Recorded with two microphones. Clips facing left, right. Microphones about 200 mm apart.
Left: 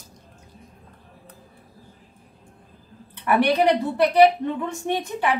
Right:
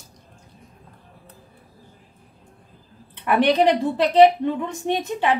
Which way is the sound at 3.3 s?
20° right (ahead or behind).